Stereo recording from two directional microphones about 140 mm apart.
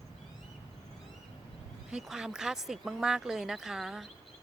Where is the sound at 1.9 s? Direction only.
5° right (ahead or behind).